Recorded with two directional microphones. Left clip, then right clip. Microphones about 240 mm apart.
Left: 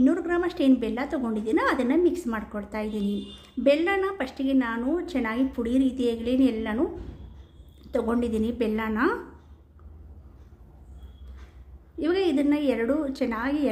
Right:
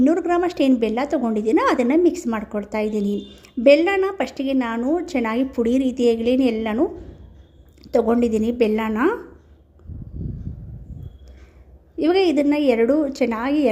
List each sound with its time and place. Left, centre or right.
0.0 s a woman's voice: right
11.9 s a woman's voice: right